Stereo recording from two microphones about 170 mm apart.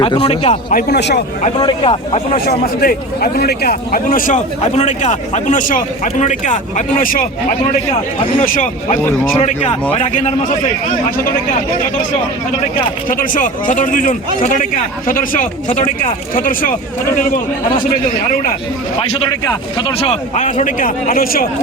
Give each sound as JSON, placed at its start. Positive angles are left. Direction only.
{"t": 0.0, "sound": "speech", "side_deg": 30}
{"t": 0.7, "sound": "speech", "side_deg": 65}
{"t": 1.5, "sound": "speech", "side_deg": 30}
{"t": 2.5, "sound": "speech", "side_deg": 60}
{"t": 7.7, "sound": "speech", "side_deg": 35}
{"t": 8.4, "sound": "speech", "side_deg": 50}
{"t": 9.4, "sound": "speech", "side_deg": 40}
{"t": 13.1, "sound": "speech", "side_deg": 55}
{"t": 19.8, "sound": "speech", "side_deg": 35}